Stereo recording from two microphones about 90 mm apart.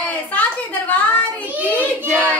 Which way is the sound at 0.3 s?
20° left (ahead or behind).